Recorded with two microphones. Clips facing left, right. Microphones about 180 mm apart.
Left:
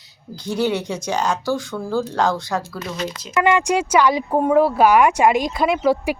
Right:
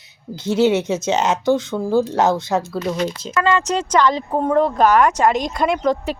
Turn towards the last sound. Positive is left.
turn(degrees=5)  # may be behind; listen again after turning